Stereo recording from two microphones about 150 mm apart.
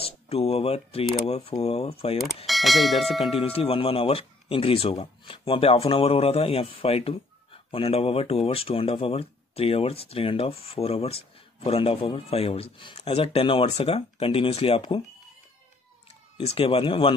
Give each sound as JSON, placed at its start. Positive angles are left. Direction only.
{"t": 0.0, "sound": "speech", "side_deg": 40}
{"t": 2.4, "sound": "speech", "side_deg": 0}
{"t": 3.3, "sound": "speech", "side_deg": 40}
{"t": 16.3, "sound": "speech", "side_deg": 40}